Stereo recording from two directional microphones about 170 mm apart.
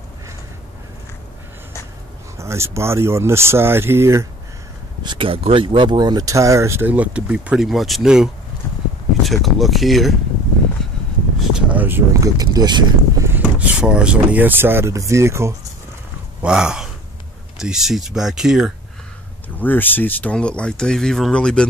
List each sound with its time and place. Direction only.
2.3 s speech: 15° right (ahead or behind)
5.0 s speech: 30° right (ahead or behind); by 10.1 s centre (ahead or behind)
10.8 s a sound: 5° left (ahead or behind)
11.5 s speech: 10° right (ahead or behind)
13.3 s speech: 10° right (ahead or behind)
16.4 s speech: 5° right (ahead or behind)
19.6 s speech: 10° left (ahead or behind)